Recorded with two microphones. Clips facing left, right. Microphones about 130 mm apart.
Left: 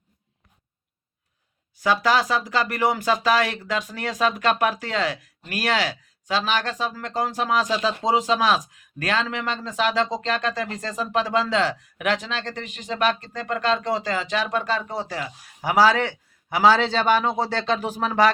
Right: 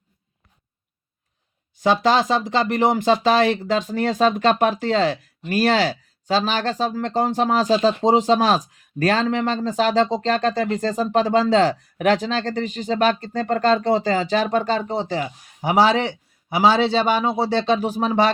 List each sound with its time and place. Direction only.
1.8 s speech: 25° right (ahead or behind)